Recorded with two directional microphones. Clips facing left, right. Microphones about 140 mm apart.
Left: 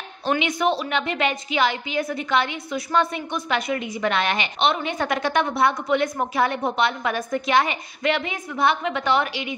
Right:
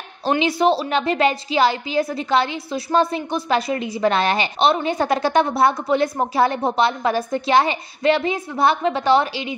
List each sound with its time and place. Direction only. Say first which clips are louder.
0.2 s a woman's voice: right 4 dB; 30° right (ahead or behind)